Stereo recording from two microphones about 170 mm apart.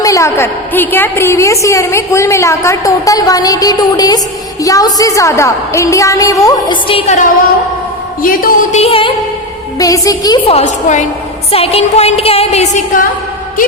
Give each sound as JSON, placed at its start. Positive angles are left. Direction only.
{"t": 0.0, "sound": "a woman's voice", "side_deg": 20}
{"t": 6.8, "sound": "a woman's voice", "side_deg": 35}
{"t": 8.2, "sound": "a sound", "side_deg": 55}
{"t": 8.8, "sound": "a woman's voice", "side_deg": 30}
{"t": 9.7, "sound": "a woman's voice", "side_deg": 20}